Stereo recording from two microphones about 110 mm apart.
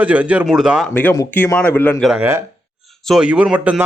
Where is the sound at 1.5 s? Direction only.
15° left (ahead or behind).